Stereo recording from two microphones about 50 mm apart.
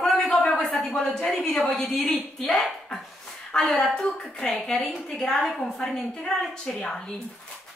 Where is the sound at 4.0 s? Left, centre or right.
Centre.